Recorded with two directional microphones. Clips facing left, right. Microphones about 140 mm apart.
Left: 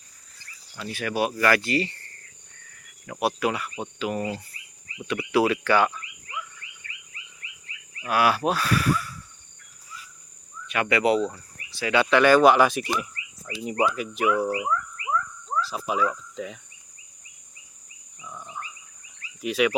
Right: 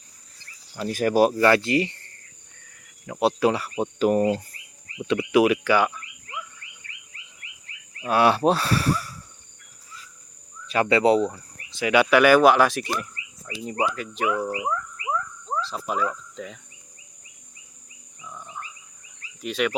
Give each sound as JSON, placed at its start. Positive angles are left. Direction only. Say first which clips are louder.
{"t": 0.8, "sound": "speech", "louder": "right 7 dB", "side_deg": -40}
{"t": 1.3, "sound": "speech", "louder": "right 4 dB", "side_deg": -25}
{"t": 3.1, "sound": "speech", "louder": "right 4 dB", "side_deg": -25}
{"t": 3.7, "sound": "speech", "louder": "right 8 dB", "side_deg": -40}
{"t": 5.0, "sound": "speech", "louder": "right 3 dB", "side_deg": -20}
{"t": 7.4, "sound": "wild animals", "louder": "left 2 dB", "side_deg": -60}
{"t": 8.0, "sound": "speech", "louder": "right 3 dB", "side_deg": -25}
{"t": 10.7, "sound": "speech", "louder": "right 3 dB", "side_deg": -30}
{"t": 15.0, "sound": "a sound", "louder": "even", "side_deg": -30}
{"t": 15.7, "sound": "speech", "louder": "left 2 dB", "side_deg": 5}
{"t": 18.3, "sound": "frog", "louder": "even", "side_deg": 5}
{"t": 19.4, "sound": "speech", "louder": "left 2 dB", "side_deg": 5}